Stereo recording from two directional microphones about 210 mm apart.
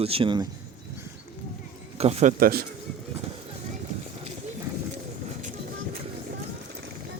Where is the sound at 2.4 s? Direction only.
45° right (ahead or behind).